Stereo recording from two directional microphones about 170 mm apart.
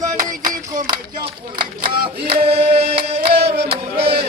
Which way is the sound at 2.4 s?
35° right (ahead or behind).